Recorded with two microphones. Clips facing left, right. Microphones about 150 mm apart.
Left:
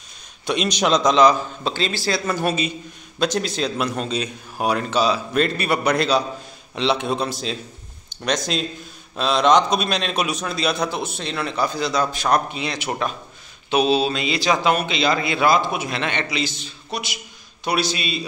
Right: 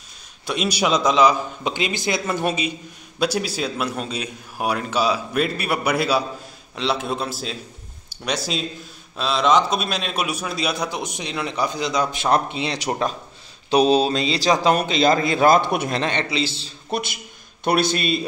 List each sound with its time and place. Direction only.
0.5 s a man's voice: 5° right (ahead or behind); by 15.6 s 45° right (ahead or behind)
15.6 s a man's voice: 60° right (ahead or behind)
15.9 s a man's voice: 35° right (ahead or behind)
16.9 s a man's voice: 50° right (ahead or behind)